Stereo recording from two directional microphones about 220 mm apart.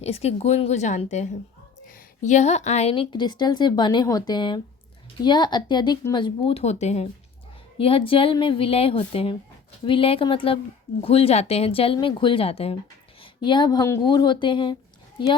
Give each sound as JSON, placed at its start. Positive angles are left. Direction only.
{"t": 0.0, "sound": "a woman's voice", "side_deg": 30}